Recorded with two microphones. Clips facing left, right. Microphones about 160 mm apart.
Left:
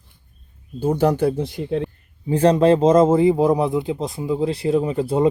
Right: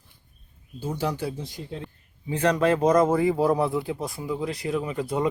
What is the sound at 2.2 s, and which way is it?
Speech, 35° left (ahead or behind).